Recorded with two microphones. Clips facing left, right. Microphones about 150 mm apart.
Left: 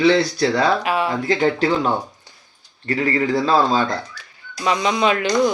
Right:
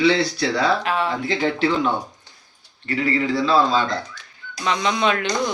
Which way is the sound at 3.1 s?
45° left (ahead or behind).